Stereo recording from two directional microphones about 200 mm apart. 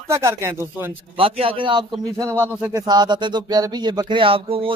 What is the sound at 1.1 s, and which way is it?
Speech, 25° right (ahead or behind).